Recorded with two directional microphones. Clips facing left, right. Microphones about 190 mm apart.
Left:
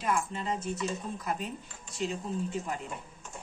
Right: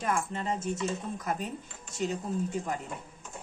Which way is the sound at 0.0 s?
50° right (ahead or behind).